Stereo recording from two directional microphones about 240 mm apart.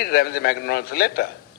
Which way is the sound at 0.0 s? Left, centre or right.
Left.